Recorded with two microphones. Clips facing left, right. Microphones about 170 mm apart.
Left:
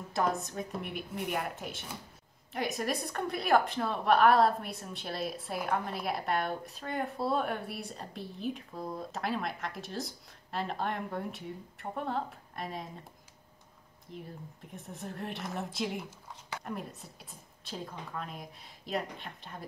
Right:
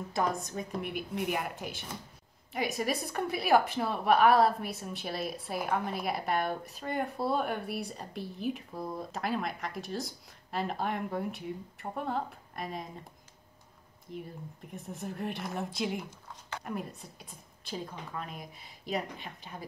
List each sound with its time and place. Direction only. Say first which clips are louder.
0.1 s a woman's voice: left 1 dB; centre (ahead or behind)
14.1 s a woman's voice: right 3 dB; centre (ahead or behind)